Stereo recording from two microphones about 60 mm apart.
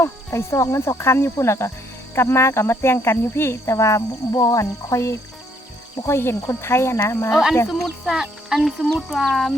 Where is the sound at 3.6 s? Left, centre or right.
Left.